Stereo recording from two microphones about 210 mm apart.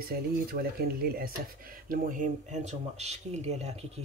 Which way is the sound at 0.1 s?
45° right (ahead or behind).